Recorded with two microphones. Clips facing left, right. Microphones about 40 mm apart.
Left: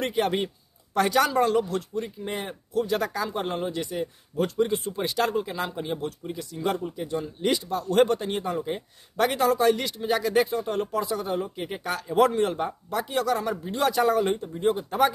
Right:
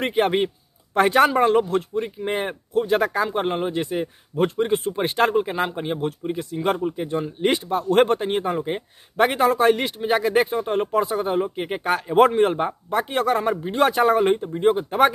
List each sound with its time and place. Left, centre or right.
0.0 s a man's voice: right